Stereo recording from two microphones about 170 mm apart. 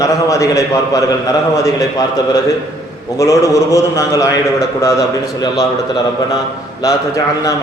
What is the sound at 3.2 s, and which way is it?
A man's voice, 20° left (ahead or behind).